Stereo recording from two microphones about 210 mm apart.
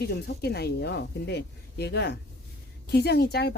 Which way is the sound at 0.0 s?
50° left (ahead or behind).